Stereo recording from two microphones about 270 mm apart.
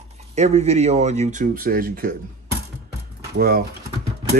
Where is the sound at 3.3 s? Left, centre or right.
Right.